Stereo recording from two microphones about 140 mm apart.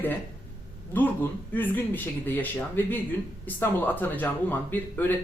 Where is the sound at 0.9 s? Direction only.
15° left (ahead or behind).